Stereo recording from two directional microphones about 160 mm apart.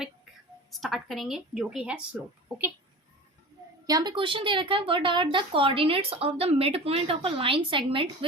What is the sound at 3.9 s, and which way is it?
Speech, 25° right (ahead or behind).